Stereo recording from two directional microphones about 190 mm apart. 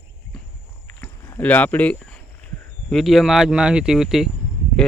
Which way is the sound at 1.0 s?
10° left (ahead or behind).